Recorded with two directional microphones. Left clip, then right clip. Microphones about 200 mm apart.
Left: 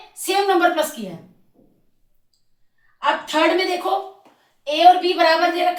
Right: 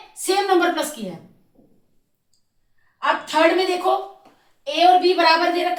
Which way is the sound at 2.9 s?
20° right (ahead or behind).